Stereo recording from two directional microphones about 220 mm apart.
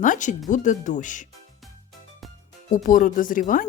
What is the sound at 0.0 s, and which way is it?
Speech, 35° left (ahead or behind).